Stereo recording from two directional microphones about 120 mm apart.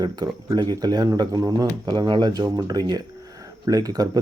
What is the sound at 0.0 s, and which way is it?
Speech, 35° right (ahead or behind).